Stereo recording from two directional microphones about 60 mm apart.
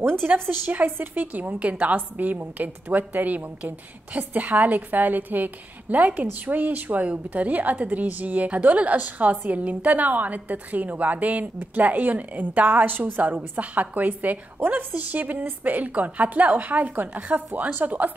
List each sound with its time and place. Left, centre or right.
0.0 s a woman's voice: right